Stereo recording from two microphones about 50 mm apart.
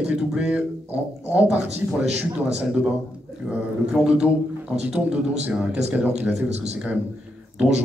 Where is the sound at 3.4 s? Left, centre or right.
Right.